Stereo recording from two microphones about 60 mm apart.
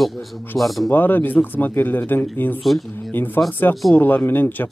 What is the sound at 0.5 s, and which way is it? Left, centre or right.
Speech, centre.